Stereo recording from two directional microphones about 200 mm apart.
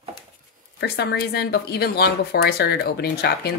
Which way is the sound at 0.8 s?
55° left (ahead or behind).